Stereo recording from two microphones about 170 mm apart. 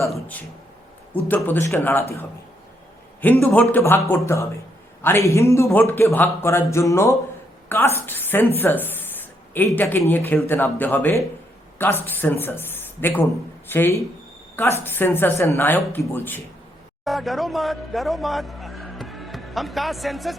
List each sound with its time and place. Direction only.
0.1 s speech: 10° left (ahead or behind)
3.5 s speech: 10° left (ahead or behind)
17.0 s speech: centre (ahead or behind)